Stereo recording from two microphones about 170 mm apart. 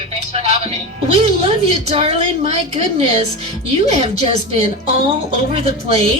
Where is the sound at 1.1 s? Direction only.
35° right (ahead or behind).